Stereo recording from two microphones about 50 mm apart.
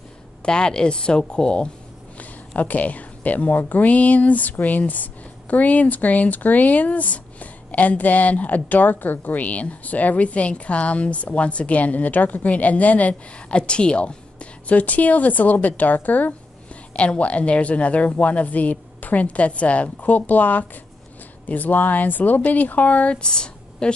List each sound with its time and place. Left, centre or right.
0.4 s speech: centre
2.1 s speech: left
13.5 s speech: centre; by 16.3 s left
16.9 s a woman's voice: left